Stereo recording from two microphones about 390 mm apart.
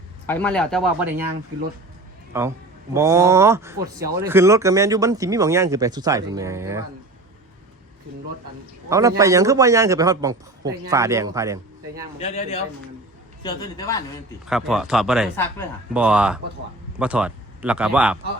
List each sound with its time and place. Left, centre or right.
0.3 s speech: centre
2.3 s speech: centre
8.9 s speech: centre
12.2 s a man's voice: centre